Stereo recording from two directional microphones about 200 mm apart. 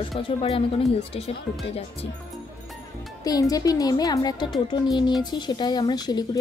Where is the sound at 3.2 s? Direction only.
20° left (ahead or behind).